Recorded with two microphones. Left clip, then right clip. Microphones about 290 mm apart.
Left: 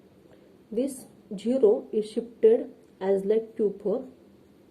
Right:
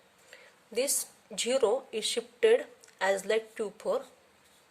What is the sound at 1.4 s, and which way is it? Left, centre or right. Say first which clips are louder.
Speech: left 5 dB; right.